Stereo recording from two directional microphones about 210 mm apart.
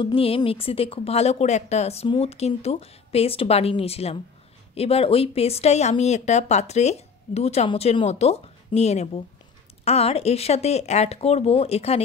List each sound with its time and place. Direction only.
0.0 s a woman's voice: 25° left (ahead or behind)